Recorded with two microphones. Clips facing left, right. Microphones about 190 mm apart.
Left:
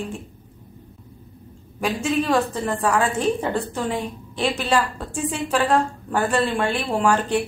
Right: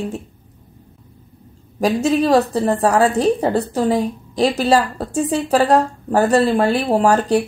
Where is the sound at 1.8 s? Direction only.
40° right (ahead or behind).